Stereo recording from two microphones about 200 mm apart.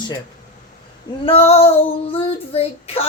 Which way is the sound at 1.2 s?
30° left (ahead or behind).